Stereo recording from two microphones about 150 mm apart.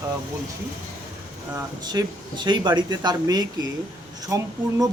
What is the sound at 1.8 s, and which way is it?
Speech, 30° right (ahead or behind).